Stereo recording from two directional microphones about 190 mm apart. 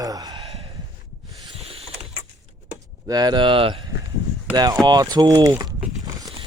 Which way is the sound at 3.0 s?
20° right (ahead or behind).